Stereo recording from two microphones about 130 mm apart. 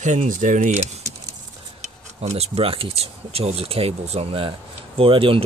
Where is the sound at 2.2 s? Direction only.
50° right (ahead or behind).